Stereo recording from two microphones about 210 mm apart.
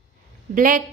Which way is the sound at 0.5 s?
40° right (ahead or behind).